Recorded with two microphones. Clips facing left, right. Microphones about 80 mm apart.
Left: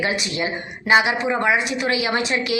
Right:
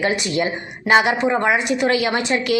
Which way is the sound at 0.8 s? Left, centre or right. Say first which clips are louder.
Right 2 dB; right.